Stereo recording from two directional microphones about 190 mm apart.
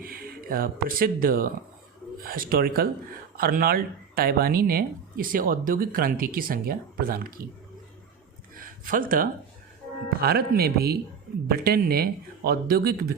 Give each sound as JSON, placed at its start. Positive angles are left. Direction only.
{"t": 0.0, "sound": "speech", "side_deg": -50}
{"t": 8.5, "sound": "a sound", "side_deg": -45}
{"t": 10.2, "sound": "speech", "side_deg": -55}